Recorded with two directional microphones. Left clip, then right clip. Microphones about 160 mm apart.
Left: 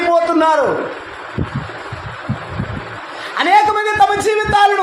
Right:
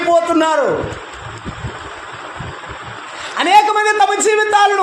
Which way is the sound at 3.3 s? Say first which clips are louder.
Right 1 dB; 35° right (ahead or behind).